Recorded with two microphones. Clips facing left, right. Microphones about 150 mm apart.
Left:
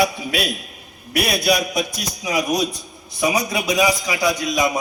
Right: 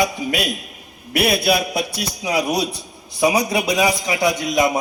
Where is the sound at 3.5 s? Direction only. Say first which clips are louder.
Right 1 dB; 30° right (ahead or behind).